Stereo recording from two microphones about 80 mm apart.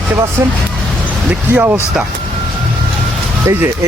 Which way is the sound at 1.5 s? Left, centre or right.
Right.